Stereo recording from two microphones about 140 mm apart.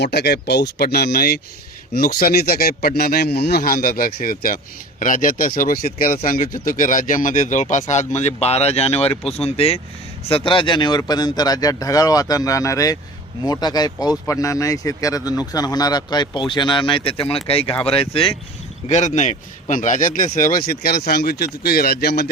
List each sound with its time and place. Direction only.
1.1 s a man's voice: 90° left; by 18.3 s 40° left (ahead or behind)
18.9 s speech: 55° left (ahead or behind); by 22.1 s 90° left